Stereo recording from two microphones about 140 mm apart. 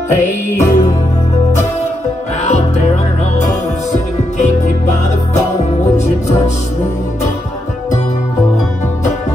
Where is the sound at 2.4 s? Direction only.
55° left (ahead or behind).